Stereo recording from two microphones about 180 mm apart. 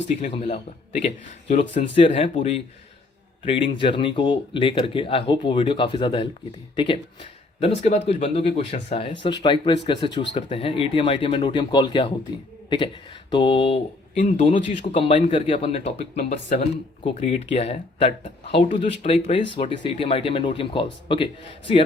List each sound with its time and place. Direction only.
0.3 s speech: 35° left (ahead or behind)
13.3 s speech: 30° left (ahead or behind)
14.2 s speech: 40° left (ahead or behind)
15.0 s speech: 30° left (ahead or behind)